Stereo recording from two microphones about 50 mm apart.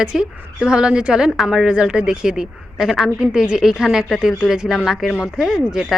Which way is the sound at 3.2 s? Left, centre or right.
Centre.